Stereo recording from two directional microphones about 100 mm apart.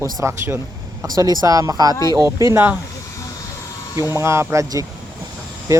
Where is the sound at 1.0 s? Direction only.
40° right (ahead or behind).